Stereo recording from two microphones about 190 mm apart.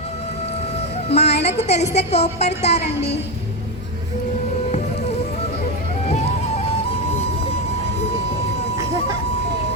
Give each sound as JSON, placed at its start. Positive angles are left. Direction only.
{"t": 1.1, "sound": "a woman's voice", "side_deg": 35}